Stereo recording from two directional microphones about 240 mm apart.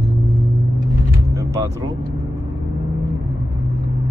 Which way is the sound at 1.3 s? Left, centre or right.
Centre.